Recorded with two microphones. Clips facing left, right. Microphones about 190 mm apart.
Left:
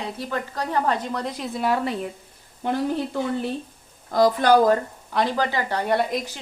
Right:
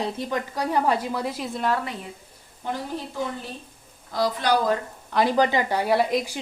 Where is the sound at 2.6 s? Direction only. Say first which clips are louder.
Left 5 dB; 70° left (ahead or behind).